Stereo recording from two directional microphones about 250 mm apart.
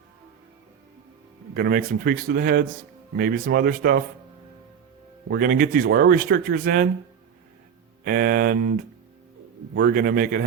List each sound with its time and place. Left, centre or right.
1.5 s speech: right
5.3 s speech: right
8.0 s speech: right
9.7 s speech: right